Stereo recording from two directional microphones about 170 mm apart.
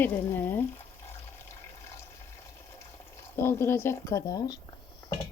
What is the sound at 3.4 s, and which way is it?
Frying, 15° left (ahead or behind).